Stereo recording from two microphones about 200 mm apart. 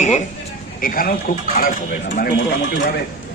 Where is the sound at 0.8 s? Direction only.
45° left (ahead or behind).